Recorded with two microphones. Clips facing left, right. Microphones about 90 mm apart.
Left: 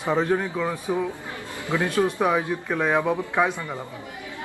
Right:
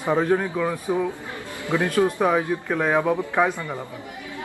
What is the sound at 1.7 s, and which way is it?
A man's voice, 15° right (ahead or behind).